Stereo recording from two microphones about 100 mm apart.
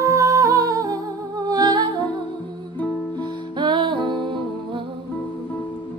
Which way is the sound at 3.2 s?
50° right (ahead or behind).